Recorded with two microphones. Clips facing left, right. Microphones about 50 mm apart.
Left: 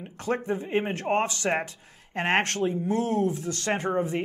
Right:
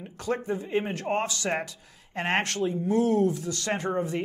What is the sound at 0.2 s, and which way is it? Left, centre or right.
Speech, left.